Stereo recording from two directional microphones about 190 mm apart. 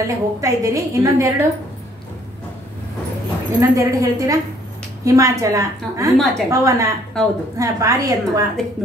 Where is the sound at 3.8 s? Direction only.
15° right (ahead or behind).